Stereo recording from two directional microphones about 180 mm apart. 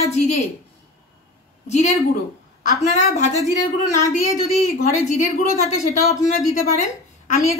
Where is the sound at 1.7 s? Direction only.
40° left (ahead or behind).